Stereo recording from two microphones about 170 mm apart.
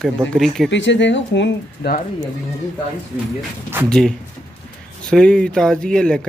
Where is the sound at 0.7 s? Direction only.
90° left.